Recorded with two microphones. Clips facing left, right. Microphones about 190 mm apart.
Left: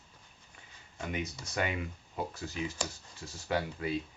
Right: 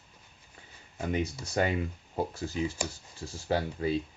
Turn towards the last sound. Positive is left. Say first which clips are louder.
# right 4 dB
turn(degrees=-30)  # may be behind; listen again after turning